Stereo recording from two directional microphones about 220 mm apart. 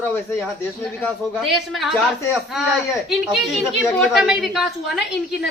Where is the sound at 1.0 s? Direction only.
Centre (ahead or behind).